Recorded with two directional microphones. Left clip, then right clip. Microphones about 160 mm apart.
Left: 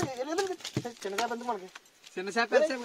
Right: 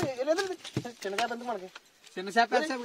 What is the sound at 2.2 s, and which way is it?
Speech, 45° right (ahead or behind).